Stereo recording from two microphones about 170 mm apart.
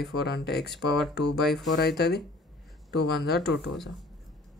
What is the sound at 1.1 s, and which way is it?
Speech, 75° left (ahead or behind).